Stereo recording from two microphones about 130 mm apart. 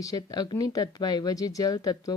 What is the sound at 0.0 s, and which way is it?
A woman's voice, 30° left (ahead or behind).